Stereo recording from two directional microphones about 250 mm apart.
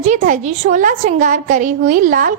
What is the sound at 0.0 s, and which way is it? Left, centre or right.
A woman's voice, right.